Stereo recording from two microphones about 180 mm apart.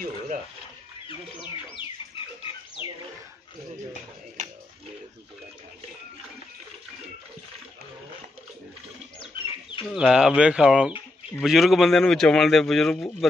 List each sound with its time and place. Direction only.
1.0 s bird: 30° left (ahead or behind)
9.2 s a sound: 30° left (ahead or behind)
9.8 s a man's voice: 5° right (ahead or behind)